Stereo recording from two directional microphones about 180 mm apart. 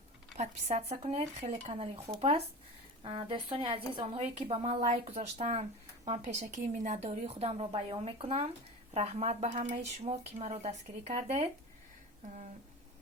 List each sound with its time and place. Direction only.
0.3 s a woman's voice: 35° right (ahead or behind)